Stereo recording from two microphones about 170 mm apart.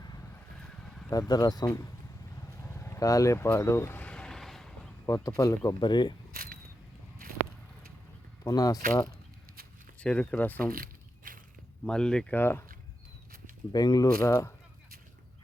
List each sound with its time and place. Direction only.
1.3 s speech: 20° left (ahead or behind)
2.6 s vehicle: 15° left (ahead or behind)
5.0 s speech: 20° left (ahead or behind)
6.3 s a sound: 60° right (ahead or behind)
8.4 s speech: 20° left (ahead or behind)
10.0 s speech: 5° left (ahead or behind)
10.7 s a sound: 55° right (ahead or behind)
11.9 s speech: 5° left (ahead or behind)
13.7 s speech: 25° left (ahead or behind)